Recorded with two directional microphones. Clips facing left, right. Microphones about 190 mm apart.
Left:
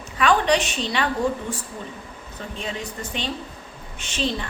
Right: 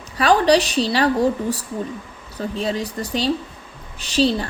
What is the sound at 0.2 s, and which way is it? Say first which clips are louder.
A woman's voice: right 4 dB; 35° right (ahead or behind).